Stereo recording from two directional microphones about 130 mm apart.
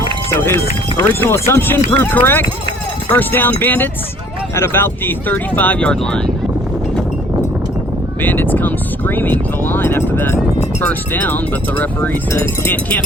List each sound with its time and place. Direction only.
0.3 s speech: 20° left (ahead or behind)
8.2 s speech: 15° left (ahead or behind)